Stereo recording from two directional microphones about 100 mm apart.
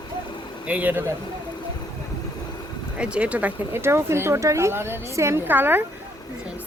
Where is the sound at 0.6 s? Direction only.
15° right (ahead or behind).